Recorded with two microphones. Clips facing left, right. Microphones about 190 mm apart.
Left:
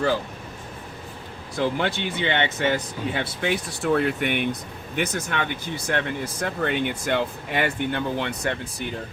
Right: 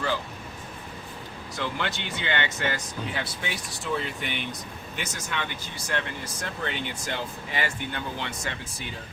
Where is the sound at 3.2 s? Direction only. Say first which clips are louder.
Left 8 dB; 60° left (ahead or behind).